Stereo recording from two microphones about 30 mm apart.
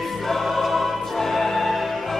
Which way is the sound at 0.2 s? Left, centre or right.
Centre.